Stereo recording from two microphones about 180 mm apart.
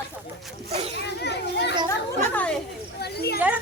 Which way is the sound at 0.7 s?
35° right (ahead or behind).